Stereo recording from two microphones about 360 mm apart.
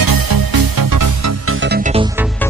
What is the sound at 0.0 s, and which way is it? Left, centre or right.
Music, right.